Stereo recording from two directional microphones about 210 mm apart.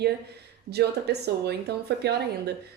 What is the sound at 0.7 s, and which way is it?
Speech, 50° right (ahead or behind).